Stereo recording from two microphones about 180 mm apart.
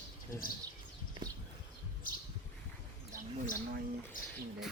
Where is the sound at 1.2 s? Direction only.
25° right (ahead or behind).